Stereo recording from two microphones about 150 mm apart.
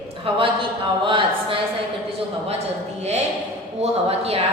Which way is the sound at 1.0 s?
35° right (ahead or behind).